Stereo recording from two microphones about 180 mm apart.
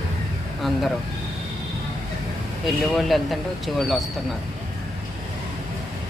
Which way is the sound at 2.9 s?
Centre (ahead or behind).